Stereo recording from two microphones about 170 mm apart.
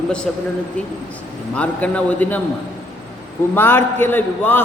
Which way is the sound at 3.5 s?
10° left (ahead or behind).